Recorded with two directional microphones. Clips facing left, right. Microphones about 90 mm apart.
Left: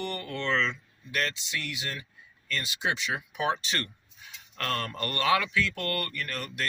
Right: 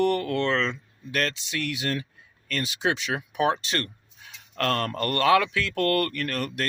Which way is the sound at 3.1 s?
50° right (ahead or behind).